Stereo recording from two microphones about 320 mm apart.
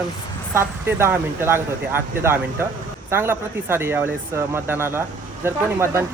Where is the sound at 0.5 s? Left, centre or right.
Centre.